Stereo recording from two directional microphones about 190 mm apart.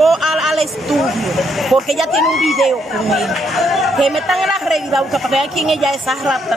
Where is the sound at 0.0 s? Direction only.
Centre (ahead or behind).